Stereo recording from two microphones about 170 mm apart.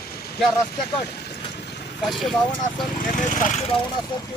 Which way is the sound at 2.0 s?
Centre (ahead or behind).